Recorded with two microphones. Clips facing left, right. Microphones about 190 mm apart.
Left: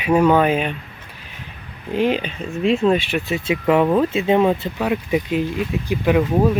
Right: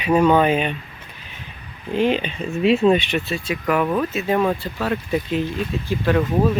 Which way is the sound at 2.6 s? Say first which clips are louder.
Right 1 dB; 5° right (ahead or behind).